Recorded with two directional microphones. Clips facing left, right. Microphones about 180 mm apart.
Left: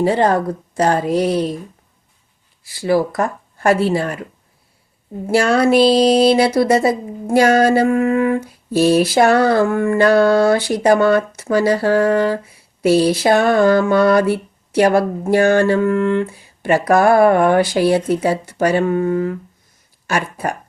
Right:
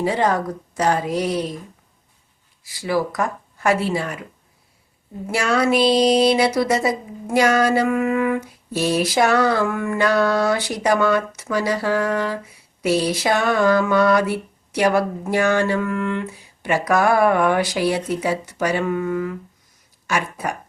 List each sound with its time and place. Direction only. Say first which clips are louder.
0.2 s a woman's voice: left 4 dB; 30° left (ahead or behind)
2.8 s speech: left 5 dB; 30° left (ahead or behind)
5.2 s speech: left 5 dB; 35° left (ahead or behind)